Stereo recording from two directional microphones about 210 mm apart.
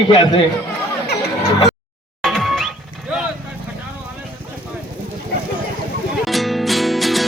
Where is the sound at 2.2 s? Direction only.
Centre (ahead or behind).